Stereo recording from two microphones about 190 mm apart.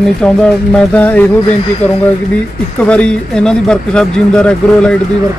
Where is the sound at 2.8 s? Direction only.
5° left (ahead or behind).